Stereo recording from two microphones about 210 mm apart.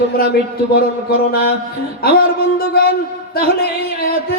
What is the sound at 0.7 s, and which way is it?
Speech, 45° left (ahead or behind).